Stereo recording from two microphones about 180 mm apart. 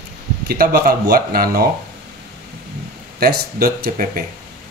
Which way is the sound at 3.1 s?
60° right (ahead or behind).